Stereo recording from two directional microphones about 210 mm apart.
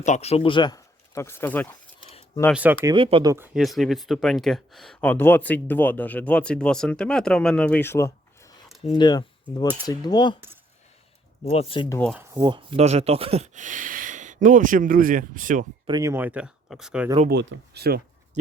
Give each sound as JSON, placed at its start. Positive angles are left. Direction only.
{"t": 0.0, "sound": "speech", "side_deg": 35}
{"t": 2.5, "sound": "speech", "side_deg": -5}
{"t": 2.8, "sound": "speech", "side_deg": -25}
{"t": 3.3, "sound": "speech", "side_deg": -5}
{"t": 11.4, "sound": "speech", "side_deg": 25}
{"t": 12.1, "sound": "speech", "side_deg": -15}
{"t": 15.9, "sound": "speech", "side_deg": -15}
{"t": 17.2, "sound": "speech", "side_deg": -50}